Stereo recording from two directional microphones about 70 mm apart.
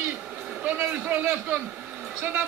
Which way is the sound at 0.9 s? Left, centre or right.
Right.